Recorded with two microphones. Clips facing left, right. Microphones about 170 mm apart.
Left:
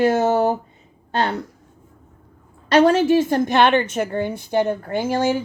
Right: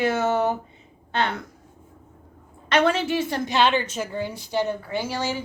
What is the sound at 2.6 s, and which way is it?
A woman's voice, 40° left (ahead or behind).